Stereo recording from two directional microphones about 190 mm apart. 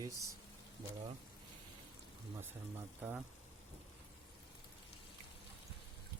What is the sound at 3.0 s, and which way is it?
Speech, 5° right (ahead or behind).